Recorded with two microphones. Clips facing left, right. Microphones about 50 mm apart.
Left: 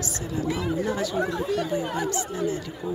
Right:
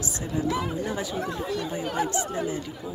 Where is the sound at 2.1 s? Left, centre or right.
Right.